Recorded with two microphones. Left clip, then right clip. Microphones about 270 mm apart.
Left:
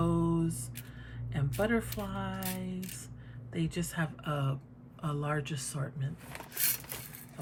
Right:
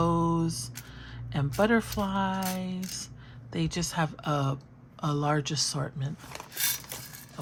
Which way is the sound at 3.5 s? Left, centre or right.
Centre.